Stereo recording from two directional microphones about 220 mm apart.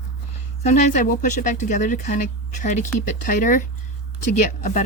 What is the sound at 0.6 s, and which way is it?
Speech, 35° left (ahead or behind).